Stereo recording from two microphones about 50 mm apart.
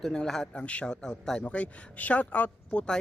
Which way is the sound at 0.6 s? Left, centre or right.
Left.